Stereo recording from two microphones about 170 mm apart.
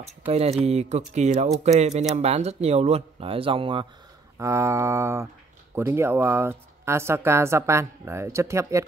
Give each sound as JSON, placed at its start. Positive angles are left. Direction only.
{"t": 0.3, "sound": "speech", "side_deg": -35}
{"t": 4.4, "sound": "speech", "side_deg": -15}